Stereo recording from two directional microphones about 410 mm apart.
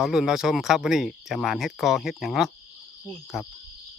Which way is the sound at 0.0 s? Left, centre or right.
Centre.